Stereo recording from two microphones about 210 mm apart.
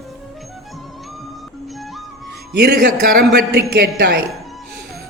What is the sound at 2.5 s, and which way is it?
A man's voice, 45° right (ahead or behind).